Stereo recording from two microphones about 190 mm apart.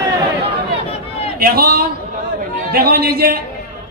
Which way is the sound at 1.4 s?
55° right (ahead or behind).